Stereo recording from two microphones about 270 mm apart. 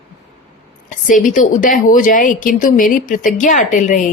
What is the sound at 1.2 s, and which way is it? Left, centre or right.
Speech, left.